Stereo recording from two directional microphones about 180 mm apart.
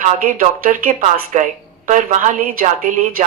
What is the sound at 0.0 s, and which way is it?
A woman's voice, 50° right (ahead or behind).